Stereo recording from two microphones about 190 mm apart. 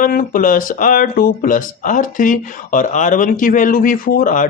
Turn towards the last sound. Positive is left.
turn(degrees=45)  # may be behind; listen again after turning